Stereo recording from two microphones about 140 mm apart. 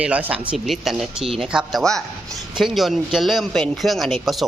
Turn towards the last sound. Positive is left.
turn(degrees=0)  # may be behind; listen again after turning